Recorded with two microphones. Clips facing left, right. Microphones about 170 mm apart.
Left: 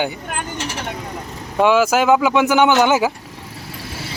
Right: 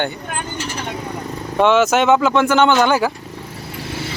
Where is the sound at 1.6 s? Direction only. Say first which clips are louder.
Right 1 dB; 10° left (ahead or behind).